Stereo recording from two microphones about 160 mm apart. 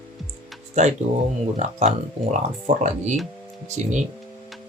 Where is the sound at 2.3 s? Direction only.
50° right (ahead or behind).